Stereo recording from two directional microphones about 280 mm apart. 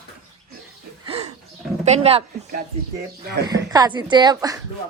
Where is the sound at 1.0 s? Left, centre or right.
Right.